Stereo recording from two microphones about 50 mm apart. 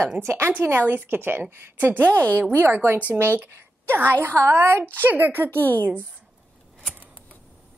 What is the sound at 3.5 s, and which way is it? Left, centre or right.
A woman's voice, right.